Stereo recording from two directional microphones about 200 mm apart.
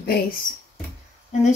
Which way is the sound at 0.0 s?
50° left (ahead or behind).